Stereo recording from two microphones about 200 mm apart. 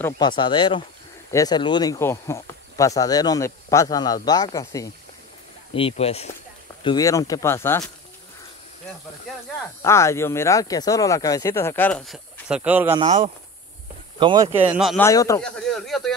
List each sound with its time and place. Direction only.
0.2 s speech: 25° left (ahead or behind)
5.8 s speech: 30° left (ahead or behind)
6.8 s speech: 20° left (ahead or behind)
9.8 s speech: 15° left (ahead or behind); by 13.0 s 10° right (ahead or behind)
13.0 s speech: 35° right (ahead or behind)
14.2 s speech: 20° right (ahead or behind)
14.7 s speech: centre (ahead or behind)
15.0 s speech: 15° left (ahead or behind)
15.4 s speech: centre (ahead or behind)